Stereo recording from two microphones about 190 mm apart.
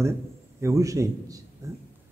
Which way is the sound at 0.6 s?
15° right (ahead or behind).